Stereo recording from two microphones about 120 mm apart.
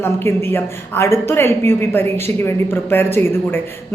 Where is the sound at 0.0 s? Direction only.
20° left (ahead or behind).